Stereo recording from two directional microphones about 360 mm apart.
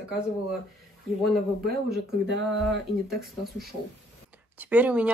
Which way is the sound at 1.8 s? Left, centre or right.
Right.